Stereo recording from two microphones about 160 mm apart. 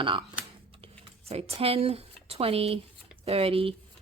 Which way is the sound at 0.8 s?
40° right (ahead or behind).